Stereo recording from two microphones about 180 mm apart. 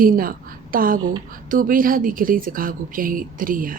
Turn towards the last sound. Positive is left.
turn(degrees=-50)  # may be behind; listen again after turning